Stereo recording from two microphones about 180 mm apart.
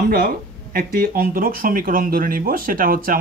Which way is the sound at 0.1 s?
55° right (ahead or behind).